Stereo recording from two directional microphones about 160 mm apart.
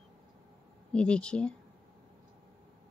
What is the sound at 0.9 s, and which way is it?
Speech, 5° left (ahead or behind).